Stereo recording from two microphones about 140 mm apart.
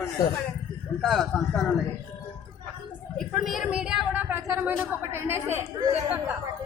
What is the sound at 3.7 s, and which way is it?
A woman's voice, 5° right (ahead or behind).